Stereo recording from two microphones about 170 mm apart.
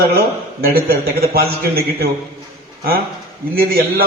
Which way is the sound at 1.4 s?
65° right (ahead or behind).